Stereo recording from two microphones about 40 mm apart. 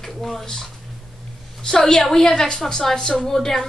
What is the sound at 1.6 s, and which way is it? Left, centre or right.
A woman's voice, centre.